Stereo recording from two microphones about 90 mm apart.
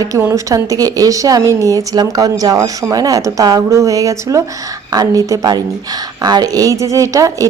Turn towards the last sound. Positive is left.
turn(degrees=-35)  # may be behind; listen again after turning